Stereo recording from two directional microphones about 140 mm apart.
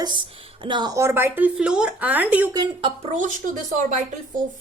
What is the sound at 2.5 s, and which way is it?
Speech, 35° right (ahead or behind).